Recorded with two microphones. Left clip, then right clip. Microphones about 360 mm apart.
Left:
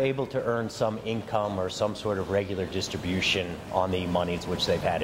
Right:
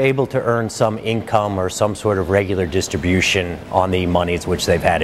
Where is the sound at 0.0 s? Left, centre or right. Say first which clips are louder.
Right 10 dB; right.